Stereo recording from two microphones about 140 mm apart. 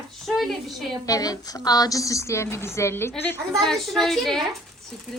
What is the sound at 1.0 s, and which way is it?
A woman's voice, 25° left (ahead or behind).